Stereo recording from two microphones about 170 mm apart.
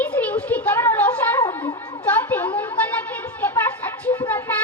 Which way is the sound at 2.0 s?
10° left (ahead or behind).